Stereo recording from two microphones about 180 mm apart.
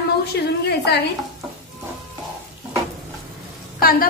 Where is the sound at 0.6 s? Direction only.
65° left (ahead or behind).